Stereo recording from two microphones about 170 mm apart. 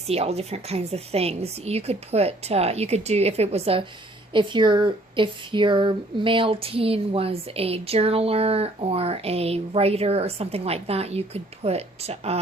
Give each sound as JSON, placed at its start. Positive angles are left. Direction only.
{"t": 0.1, "sound": "speech", "side_deg": -40}